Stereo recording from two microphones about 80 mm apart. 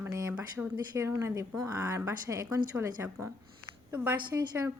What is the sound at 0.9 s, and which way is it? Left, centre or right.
A woman's voice, right.